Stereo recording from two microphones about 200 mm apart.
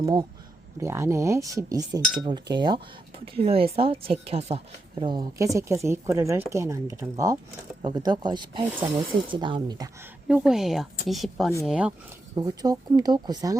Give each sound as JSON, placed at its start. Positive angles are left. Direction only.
{"t": 0.0, "sound": "a woman's voice", "side_deg": -20}
{"t": 10.2, "sound": "speech", "side_deg": -5}
{"t": 12.4, "sound": "a woman's voice", "side_deg": -20}